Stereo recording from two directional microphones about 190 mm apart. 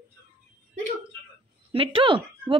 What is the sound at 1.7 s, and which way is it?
Speech, 30° right (ahead or behind).